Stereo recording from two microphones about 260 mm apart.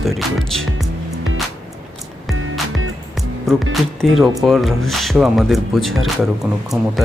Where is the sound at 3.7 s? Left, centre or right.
Centre.